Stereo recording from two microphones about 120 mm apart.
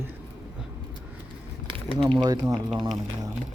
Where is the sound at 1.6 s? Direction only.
50° right (ahead or behind).